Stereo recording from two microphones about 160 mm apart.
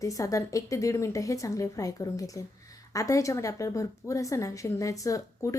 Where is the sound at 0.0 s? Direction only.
20° left (ahead or behind).